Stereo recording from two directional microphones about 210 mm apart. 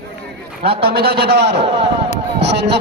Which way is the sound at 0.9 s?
50° right (ahead or behind).